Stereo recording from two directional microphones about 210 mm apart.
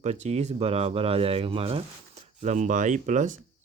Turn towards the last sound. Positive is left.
turn(degrees=-35)  # may be behind; listen again after turning